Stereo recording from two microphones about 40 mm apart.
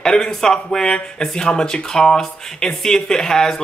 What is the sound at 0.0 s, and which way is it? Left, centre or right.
Speech, centre.